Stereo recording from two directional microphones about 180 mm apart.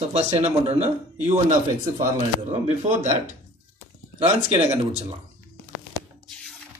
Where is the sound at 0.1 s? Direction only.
40° right (ahead or behind).